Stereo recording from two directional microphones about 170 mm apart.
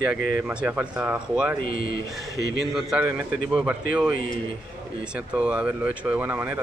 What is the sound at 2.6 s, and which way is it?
Speech, 5° right (ahead or behind).